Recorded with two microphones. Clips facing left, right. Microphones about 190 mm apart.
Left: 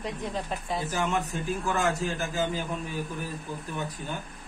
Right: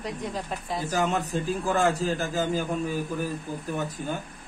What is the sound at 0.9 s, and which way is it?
A man's voice, 40° right (ahead or behind).